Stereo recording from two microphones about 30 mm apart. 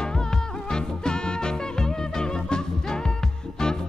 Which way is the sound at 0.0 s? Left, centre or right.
Left.